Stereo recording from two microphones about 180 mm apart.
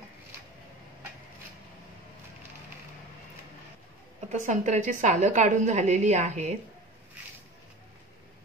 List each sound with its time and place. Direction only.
4.3 s a woman's voice: 40° right (ahead or behind)